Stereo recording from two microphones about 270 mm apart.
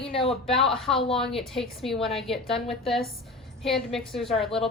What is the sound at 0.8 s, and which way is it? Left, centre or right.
A woman's voice, centre.